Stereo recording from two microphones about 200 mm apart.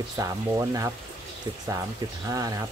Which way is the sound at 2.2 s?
15° right (ahead or behind).